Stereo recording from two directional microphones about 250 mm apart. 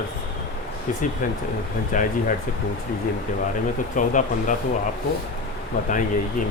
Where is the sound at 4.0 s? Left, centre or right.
Left.